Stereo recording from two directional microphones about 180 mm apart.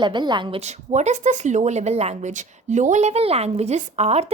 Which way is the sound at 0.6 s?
40° right (ahead or behind).